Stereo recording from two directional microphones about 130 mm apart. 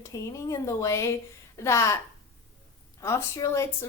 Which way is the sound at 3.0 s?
20° left (ahead or behind).